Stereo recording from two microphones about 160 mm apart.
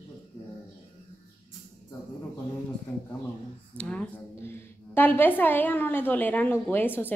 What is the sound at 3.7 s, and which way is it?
A woman's voice, 5° left (ahead or behind).